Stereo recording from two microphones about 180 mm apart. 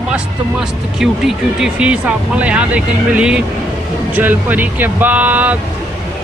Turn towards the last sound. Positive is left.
turn(degrees=-10)  # may be behind; listen again after turning